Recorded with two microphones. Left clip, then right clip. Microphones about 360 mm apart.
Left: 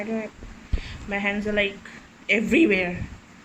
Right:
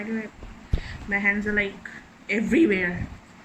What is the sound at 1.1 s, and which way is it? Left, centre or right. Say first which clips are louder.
A woman's voice: right 2 dB; centre.